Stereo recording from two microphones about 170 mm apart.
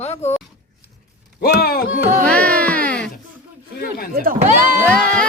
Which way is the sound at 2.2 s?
5° left (ahead or behind).